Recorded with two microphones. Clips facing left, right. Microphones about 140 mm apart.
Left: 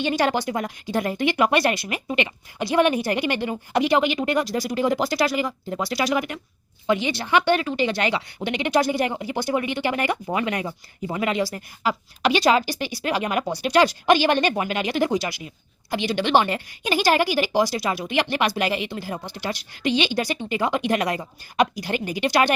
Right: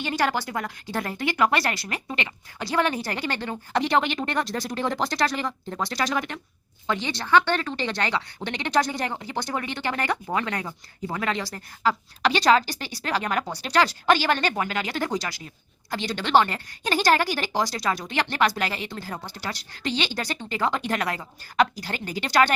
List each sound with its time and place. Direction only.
0.0 s speech: 20° left (ahead or behind)